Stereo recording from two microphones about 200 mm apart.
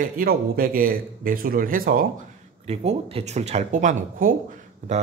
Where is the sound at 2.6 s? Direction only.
30° right (ahead or behind).